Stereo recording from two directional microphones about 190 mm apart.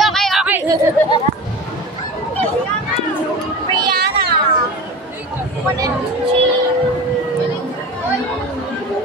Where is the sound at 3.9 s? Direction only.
55° right (ahead or behind).